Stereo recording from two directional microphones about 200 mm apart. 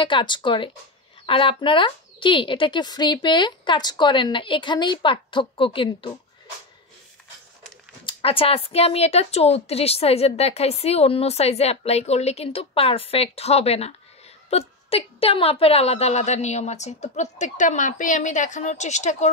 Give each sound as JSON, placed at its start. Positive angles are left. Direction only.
{"t": 0.0, "sound": "speech", "side_deg": 25}
{"t": 8.0, "sound": "speech", "side_deg": 25}